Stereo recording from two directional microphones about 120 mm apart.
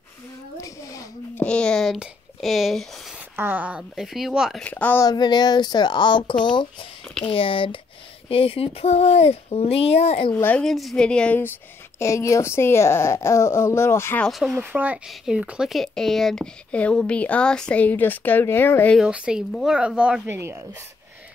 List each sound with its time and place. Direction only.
1.3 s a sound: 10° left (ahead or behind)
2.0 s speech: centre (ahead or behind)
3.3 s speech: 15° right (ahead or behind)
4.6 s speech: 10° left (ahead or behind)
5.0 s speech: 35° left (ahead or behind); by 10.3 s 55° left (ahead or behind)
10.3 s speech: 15° left (ahead or behind)
10.6 s speech: centre (ahead or behind)
12.0 s a woman's voice: 25° left (ahead or behind)
14.2 s speech: centre (ahead or behind)
14.6 s speech: 15° right (ahead or behind); by 18.9 s 15° left (ahead or behind)
18.9 s speech: 10° right (ahead or behind)
20.2 s speech: 20° right (ahead or behind)